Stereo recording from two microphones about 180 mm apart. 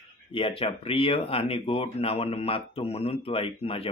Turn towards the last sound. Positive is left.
turn(degrees=30)  # may be behind; listen again after turning